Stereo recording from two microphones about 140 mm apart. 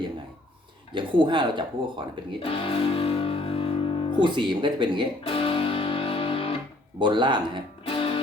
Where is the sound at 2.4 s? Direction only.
40° left (ahead or behind).